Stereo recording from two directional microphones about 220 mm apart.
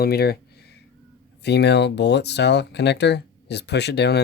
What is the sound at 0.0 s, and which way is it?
Speech, 45° left (ahead or behind).